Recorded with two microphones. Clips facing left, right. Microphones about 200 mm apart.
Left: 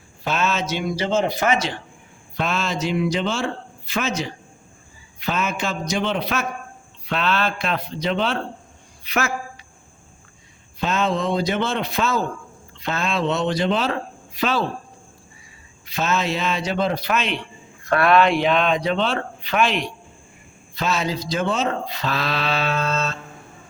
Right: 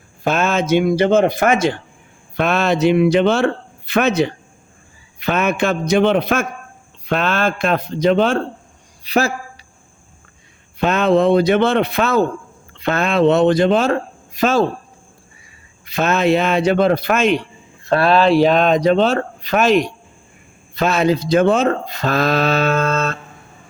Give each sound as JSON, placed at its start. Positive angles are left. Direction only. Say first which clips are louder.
{"t": 0.3, "sound": "speech", "louder": "right 7 dB", "side_deg": -50}
{"t": 2.3, "sound": "a man's voice", "louder": "right 8 dB", "side_deg": -60}
{"t": 9.0, "sound": "speech", "louder": "right 7 dB", "side_deg": -35}
{"t": 10.8, "sound": "a man's voice", "louder": "right 8 dB", "side_deg": -60}
{"t": 15.9, "sound": "a man's voice", "louder": "right 7 dB", "side_deg": -55}
{"t": 17.8, "sound": "speech", "louder": "right 3 dB", "side_deg": -30}
{"t": 20.7, "sound": "speech", "louder": "right 8 dB", "side_deg": -55}